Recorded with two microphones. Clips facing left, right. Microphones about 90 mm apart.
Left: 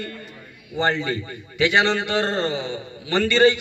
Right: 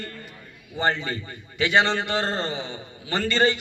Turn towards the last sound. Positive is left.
turn(degrees=-35)  # may be behind; listen again after turning